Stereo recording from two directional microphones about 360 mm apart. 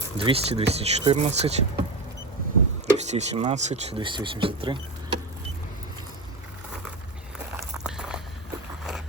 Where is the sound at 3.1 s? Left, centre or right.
Centre.